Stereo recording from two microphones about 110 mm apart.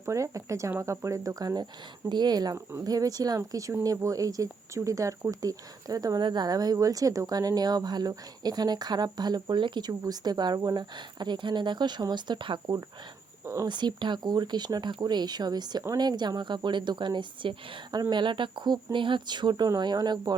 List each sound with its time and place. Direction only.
0.0 s speech: 30° right (ahead or behind); by 12.7 s 45° right (ahead or behind)
13.4 s a sound: 25° right (ahead or behind)
13.7 s speech: 45° right (ahead or behind)